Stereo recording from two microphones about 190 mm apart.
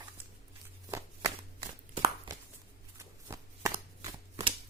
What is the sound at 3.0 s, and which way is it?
Shuffling cards, 15° right (ahead or behind).